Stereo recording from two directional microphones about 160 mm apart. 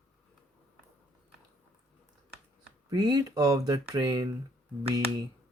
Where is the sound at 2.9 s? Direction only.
25° right (ahead or behind).